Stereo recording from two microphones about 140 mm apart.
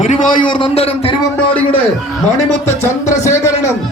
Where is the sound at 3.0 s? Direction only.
20° left (ahead or behind).